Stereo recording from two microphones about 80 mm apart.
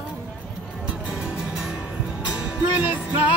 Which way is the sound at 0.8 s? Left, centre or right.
Centre.